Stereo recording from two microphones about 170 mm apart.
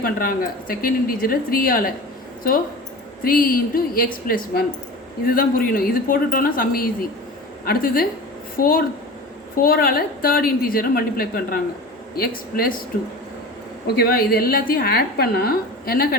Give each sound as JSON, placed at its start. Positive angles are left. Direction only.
{"t": 0.0, "sound": "a woman's voice", "side_deg": 60}
{"t": 3.2, "sound": "a woman's voice", "side_deg": 55}
{"t": 13.9, "sound": "a woman's voice", "side_deg": 60}